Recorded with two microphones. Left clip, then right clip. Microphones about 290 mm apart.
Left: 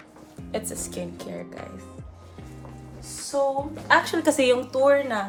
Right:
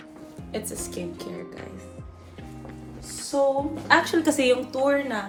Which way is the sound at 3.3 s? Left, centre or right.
Centre.